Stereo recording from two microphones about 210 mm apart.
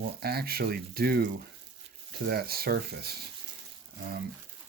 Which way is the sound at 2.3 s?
45° right (ahead or behind).